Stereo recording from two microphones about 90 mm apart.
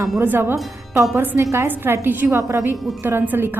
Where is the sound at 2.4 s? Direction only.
35° right (ahead or behind).